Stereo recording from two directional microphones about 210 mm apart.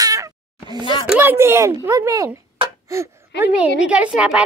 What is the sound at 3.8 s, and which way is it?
Babbling, 5° right (ahead or behind).